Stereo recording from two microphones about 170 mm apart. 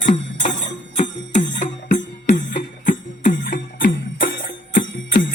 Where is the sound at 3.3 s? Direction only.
55° left (ahead or behind).